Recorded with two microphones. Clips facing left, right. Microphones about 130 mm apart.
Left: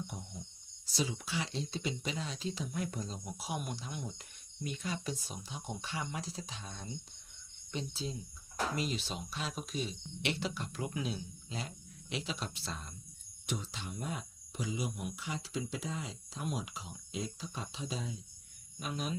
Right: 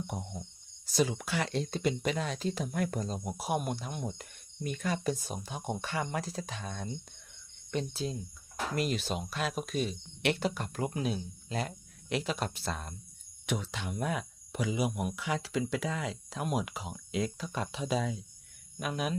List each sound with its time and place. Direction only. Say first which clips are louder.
0.9 s speech: right 6 dB; 55° right (ahead or behind)
13.4 s speech: right 5 dB; 65° right (ahead or behind)
18.8 s speech: right 5 dB; 65° right (ahead or behind)